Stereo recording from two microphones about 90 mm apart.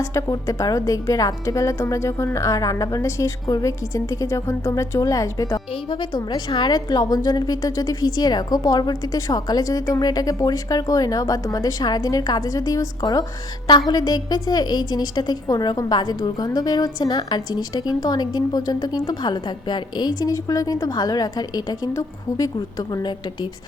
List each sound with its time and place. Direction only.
0.0 s a woman's voice: 35° left (ahead or behind)
5.9 s a woman's voice: 60° left (ahead or behind); by 13.2 s 40° left (ahead or behind)
13.7 s a woman's voice: 55° left (ahead or behind)